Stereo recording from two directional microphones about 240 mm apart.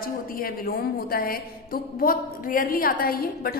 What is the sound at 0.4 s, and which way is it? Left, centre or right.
A woman's voice, left.